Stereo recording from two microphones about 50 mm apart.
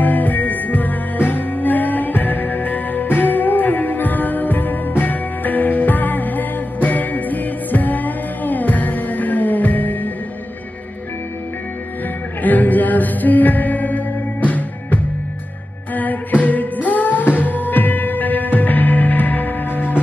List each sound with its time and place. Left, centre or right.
0.0 s music: left
12.4 s music: left